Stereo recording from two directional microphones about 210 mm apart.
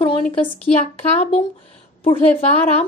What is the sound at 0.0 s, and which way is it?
A woman's voice, 30° left (ahead or behind).